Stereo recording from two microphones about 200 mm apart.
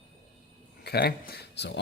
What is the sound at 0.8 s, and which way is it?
Speech, 55° left (ahead or behind).